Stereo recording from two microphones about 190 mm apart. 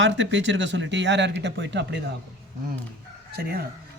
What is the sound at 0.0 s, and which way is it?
Speech, 70° right (ahead or behind).